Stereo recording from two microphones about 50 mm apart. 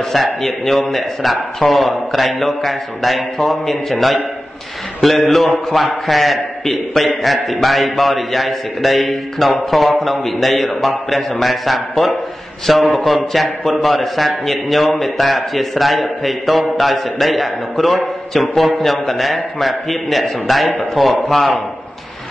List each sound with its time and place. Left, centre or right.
0.1 s a man's voice: centre